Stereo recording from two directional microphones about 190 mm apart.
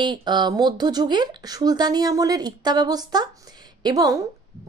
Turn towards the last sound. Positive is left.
turn(degrees=-20)  # may be behind; listen again after turning